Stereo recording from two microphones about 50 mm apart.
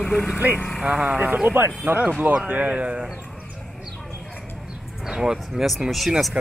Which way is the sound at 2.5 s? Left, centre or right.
Right.